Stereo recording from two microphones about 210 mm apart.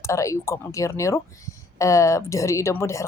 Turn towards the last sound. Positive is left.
turn(degrees=15)  # may be behind; listen again after turning